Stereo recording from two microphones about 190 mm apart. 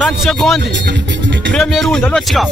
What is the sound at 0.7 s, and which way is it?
Speech, 70° right (ahead or behind).